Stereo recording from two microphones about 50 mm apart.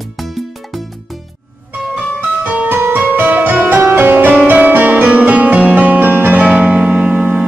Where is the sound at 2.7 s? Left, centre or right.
Right.